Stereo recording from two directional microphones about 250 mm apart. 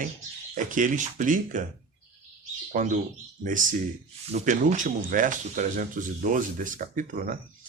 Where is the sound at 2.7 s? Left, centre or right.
Right.